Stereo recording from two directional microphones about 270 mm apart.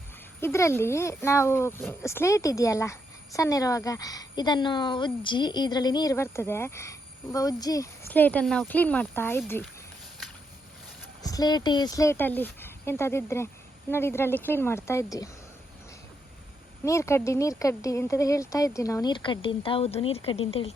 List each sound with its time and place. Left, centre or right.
0.4 s speech: centre
11.2 s speech: centre
16.8 s speech: centre